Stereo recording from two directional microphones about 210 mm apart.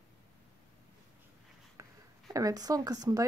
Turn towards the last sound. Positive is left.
turn(degrees=-20)  # may be behind; listen again after turning